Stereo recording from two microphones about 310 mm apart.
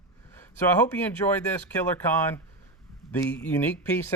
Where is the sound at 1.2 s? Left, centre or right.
Centre.